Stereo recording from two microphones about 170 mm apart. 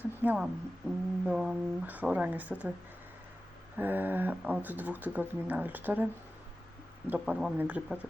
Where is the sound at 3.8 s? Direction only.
10° right (ahead or behind).